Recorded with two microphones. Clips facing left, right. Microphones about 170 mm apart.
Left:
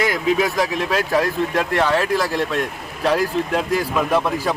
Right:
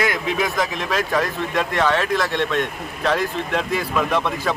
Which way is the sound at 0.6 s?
35° left (ahead or behind).